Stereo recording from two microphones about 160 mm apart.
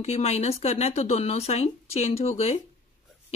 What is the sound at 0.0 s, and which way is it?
Speech, 40° left (ahead or behind).